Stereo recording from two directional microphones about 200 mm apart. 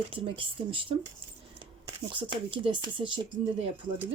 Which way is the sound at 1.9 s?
25° right (ahead or behind).